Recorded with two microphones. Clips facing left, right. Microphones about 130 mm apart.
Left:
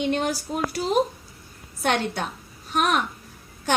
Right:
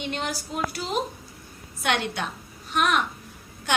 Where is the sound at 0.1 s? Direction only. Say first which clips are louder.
Left 6 dB; 45° left (ahead or behind).